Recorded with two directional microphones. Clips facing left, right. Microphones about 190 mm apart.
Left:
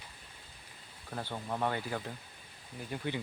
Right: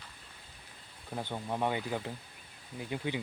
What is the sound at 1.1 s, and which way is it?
Speech, 15° right (ahead or behind).